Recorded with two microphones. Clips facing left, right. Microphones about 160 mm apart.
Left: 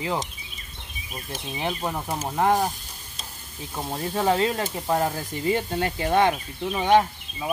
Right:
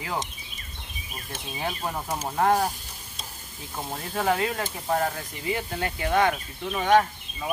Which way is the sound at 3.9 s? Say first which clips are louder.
Left 3 dB; 25° left (ahead or behind).